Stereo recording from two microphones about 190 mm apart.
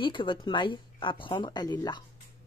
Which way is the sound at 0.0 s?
25° left (ahead or behind).